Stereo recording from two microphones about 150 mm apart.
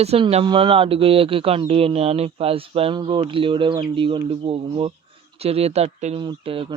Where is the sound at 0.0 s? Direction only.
45° right (ahead or behind).